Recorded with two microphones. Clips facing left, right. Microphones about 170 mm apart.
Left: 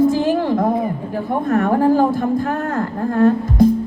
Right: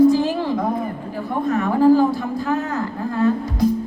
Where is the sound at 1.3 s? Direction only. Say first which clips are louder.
Left 4 dB; 55° left (ahead or behind).